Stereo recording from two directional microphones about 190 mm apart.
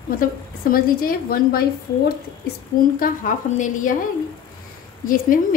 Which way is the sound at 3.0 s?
45° left (ahead or behind).